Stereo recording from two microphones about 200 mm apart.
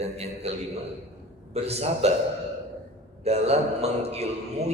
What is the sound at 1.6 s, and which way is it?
Speech, 30° right (ahead or behind).